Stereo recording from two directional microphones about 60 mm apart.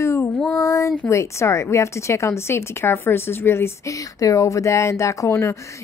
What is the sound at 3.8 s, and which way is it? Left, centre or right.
Speech, left.